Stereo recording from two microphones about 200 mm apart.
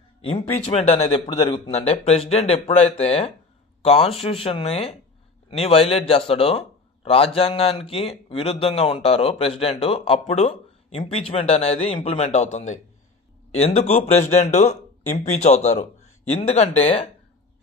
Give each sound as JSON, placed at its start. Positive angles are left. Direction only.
{"t": 0.2, "sound": "a man's voice", "side_deg": 25}